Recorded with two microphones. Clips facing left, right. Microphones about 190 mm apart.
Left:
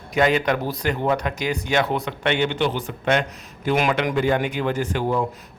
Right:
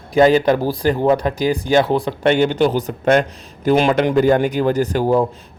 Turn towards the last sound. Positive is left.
turn(degrees=-35)  # may be behind; listen again after turning